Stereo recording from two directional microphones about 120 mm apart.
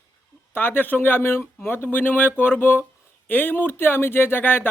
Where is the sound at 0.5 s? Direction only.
15° left (ahead or behind).